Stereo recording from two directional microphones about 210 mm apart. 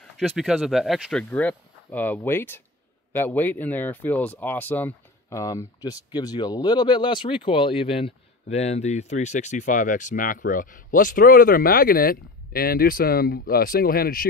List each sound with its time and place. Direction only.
0.4 s speech: centre (ahead or behind); by 14.2 s 45° left (ahead or behind)